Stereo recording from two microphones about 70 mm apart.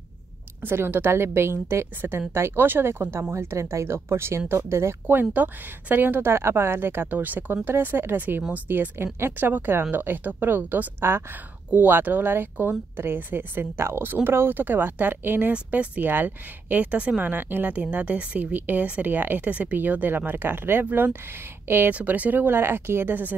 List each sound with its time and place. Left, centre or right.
0.6 s a woman's voice: right
15.5 s speech: centre
17.2 s a woman's voice: right
21.9 s speech: right